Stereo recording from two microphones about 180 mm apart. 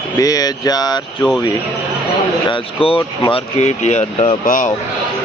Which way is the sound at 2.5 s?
30° left (ahead or behind).